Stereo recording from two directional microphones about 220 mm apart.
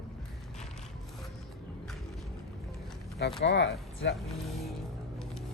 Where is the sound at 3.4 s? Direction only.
55° left (ahead or behind).